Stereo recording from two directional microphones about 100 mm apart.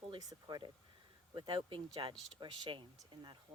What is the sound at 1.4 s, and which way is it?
Speech, 55° right (ahead or behind).